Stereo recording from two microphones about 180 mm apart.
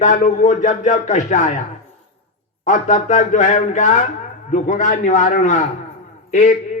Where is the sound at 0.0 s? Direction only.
45° left (ahead or behind).